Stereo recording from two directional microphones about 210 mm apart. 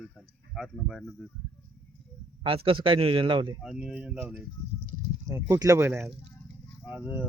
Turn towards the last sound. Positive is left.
turn(degrees=-5)  # may be behind; listen again after turning